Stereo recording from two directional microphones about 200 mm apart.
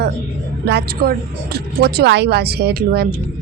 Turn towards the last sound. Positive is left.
turn(degrees=-55)  # may be behind; listen again after turning